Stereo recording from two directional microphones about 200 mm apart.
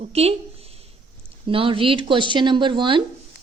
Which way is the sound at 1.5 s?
25° right (ahead or behind).